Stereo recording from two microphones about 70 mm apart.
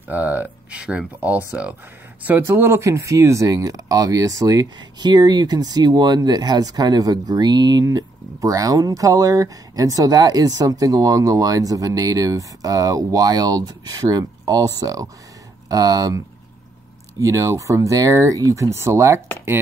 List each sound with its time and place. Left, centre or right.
0.1 s speech: right
2.4 s speech: right
7.8 s speech: right
17.2 s speech: right